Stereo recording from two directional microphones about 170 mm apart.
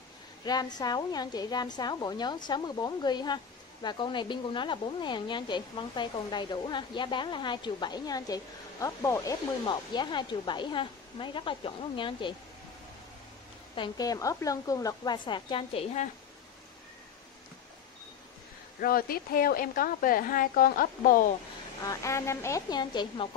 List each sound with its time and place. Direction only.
0.5 s a woman's voice: 25° left (ahead or behind)
13.7 s a woman's voice: 25° left (ahead or behind)
18.8 s a woman's voice: 60° left (ahead or behind)
21.8 s a woman's voice: 15° left (ahead or behind)